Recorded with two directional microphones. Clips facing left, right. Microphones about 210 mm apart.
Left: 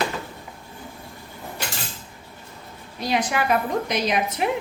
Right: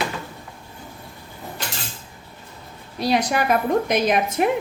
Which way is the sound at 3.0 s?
40° right (ahead or behind).